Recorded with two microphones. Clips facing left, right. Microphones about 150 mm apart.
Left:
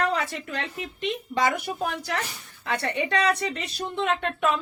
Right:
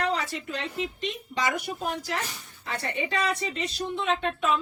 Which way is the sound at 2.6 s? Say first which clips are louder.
Left 4 dB; 65° left (ahead or behind).